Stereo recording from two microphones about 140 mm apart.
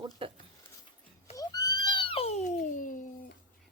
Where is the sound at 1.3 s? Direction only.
25° left (ahead or behind).